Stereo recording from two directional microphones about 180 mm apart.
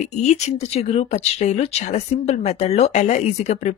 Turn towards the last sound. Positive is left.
turn(degrees=40)  # may be behind; listen again after turning